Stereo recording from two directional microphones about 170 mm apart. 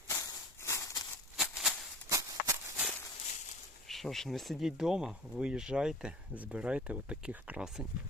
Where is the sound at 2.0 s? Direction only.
20° right (ahead or behind).